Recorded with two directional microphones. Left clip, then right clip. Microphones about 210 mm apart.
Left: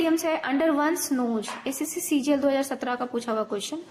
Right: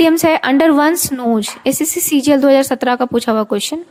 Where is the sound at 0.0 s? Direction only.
55° right (ahead or behind).